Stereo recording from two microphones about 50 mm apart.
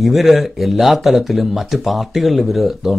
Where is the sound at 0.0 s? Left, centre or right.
Centre.